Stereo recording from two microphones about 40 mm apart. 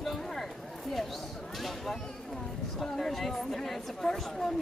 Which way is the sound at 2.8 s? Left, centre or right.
Centre.